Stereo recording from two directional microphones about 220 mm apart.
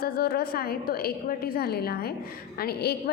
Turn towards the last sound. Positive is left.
turn(degrees=45)  # may be behind; listen again after turning